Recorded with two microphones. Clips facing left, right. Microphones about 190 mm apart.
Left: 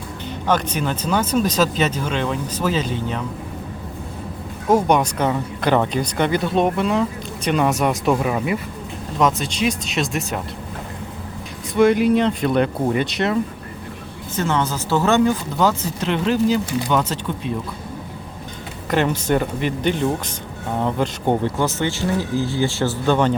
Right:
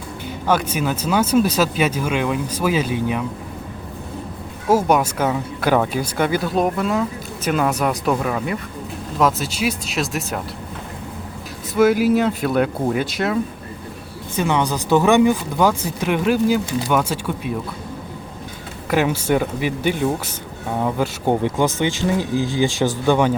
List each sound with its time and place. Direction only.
0.4 s speech: 10° right (ahead or behind)
4.7 s speech: 5° right (ahead or behind)
11.7 s speech: 5° right (ahead or behind)
14.3 s speech: 15° right (ahead or behind)
18.9 s speech: 5° right (ahead or behind)